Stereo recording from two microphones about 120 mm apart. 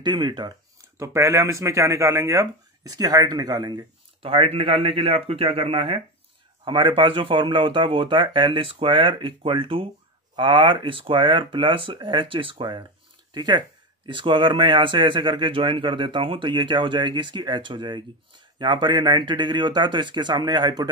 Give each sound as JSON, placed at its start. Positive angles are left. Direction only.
{"t": 0.0, "sound": "speech", "side_deg": -40}
{"t": 4.2, "sound": "speech", "side_deg": -50}